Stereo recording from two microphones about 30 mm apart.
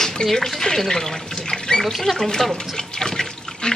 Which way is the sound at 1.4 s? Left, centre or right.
Left.